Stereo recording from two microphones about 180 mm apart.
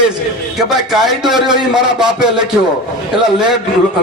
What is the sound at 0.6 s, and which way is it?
A man's voice, centre (ahead or behind).